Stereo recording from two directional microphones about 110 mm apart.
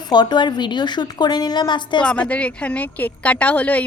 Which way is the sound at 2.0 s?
10° left (ahead or behind).